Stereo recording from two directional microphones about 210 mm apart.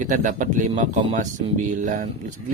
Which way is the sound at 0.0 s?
35° right (ahead or behind).